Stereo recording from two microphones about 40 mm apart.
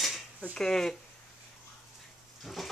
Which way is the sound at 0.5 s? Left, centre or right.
Centre.